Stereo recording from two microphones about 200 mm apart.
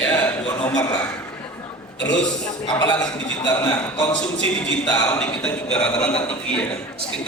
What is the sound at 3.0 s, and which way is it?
A man's voice, 20° left (ahead or behind).